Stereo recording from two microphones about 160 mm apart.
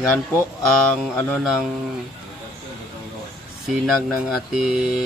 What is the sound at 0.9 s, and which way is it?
Mantra, 5° left (ahead or behind).